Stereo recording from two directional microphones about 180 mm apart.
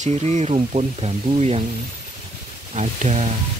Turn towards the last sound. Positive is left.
turn(degrees=-40)  # may be behind; listen again after turning